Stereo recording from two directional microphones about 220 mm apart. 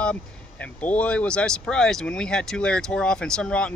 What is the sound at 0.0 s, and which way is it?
Speech, 5° left (ahead or behind).